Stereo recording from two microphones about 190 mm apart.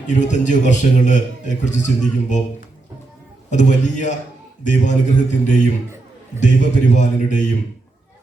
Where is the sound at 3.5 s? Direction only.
40° left (ahead or behind).